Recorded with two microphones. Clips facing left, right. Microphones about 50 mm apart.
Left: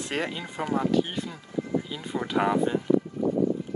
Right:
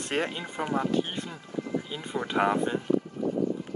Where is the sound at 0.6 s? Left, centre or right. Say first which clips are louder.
Left 1 dB; centre.